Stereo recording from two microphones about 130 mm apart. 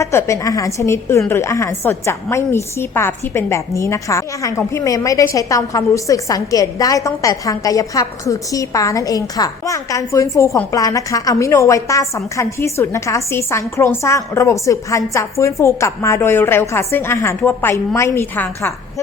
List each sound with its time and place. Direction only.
0.0 s a woman's voice: 20° left (ahead or behind)